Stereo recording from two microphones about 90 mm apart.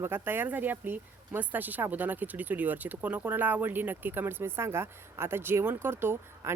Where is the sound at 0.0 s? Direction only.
25° right (ahead or behind).